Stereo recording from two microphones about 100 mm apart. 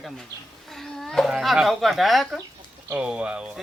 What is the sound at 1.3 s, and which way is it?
Speech, 5° right (ahead or behind).